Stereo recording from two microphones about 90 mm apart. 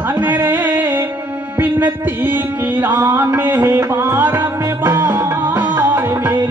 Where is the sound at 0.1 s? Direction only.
20° right (ahead or behind).